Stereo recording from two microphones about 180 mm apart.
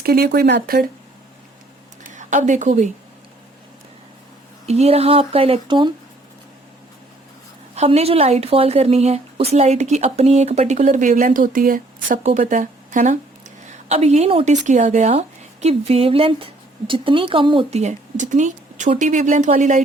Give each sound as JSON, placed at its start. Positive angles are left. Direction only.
{"t": 0.0, "sound": "speech", "side_deg": -60}
{"t": 2.0, "sound": "a woman's voice", "side_deg": -45}
{"t": 4.6, "sound": "a woman's voice", "side_deg": -35}
{"t": 7.8, "sound": "a woman's voice", "side_deg": -35}